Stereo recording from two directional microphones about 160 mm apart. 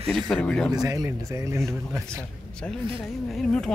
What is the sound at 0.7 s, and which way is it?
Speech, 25° right (ahead or behind).